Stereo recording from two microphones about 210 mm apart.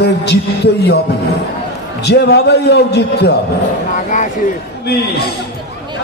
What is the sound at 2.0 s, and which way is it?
A man's voice, 55° left (ahead or behind).